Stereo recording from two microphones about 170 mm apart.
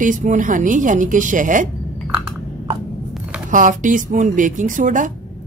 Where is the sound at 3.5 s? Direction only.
50° right (ahead or behind).